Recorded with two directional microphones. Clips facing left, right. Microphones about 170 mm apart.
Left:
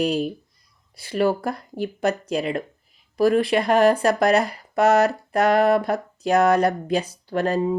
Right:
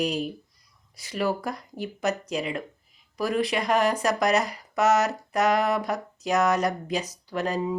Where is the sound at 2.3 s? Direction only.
60° left (ahead or behind).